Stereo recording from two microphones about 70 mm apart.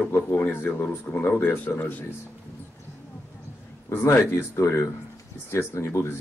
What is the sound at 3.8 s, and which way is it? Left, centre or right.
Speech, left.